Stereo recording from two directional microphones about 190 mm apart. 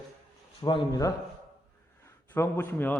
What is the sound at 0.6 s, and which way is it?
A man's voice, 20° left (ahead or behind).